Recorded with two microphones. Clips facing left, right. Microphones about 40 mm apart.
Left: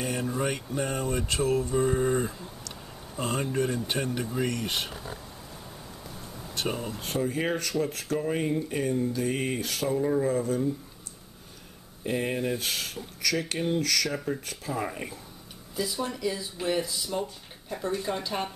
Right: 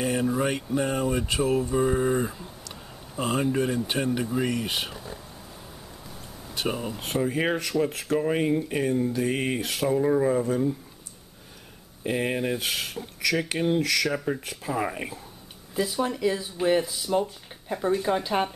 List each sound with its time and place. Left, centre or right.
0.0 s speech: centre
6.5 s speech: centre
12.0 s speech: right